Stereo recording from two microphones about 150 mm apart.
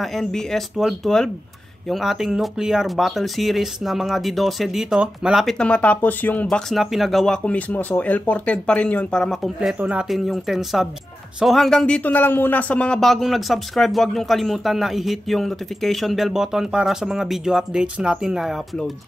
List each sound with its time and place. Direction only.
0.0 s speech: centre (ahead or behind)
6.4 s speech: centre (ahead or behind)